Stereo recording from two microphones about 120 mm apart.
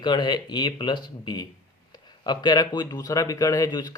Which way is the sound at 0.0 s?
40° left (ahead or behind).